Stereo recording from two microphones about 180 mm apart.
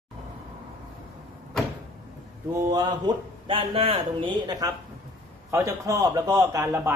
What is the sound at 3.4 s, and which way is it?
A man's voice, 30° right (ahead or behind).